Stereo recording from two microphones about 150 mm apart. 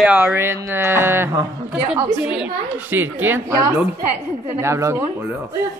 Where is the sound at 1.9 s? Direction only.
5° right (ahead or behind).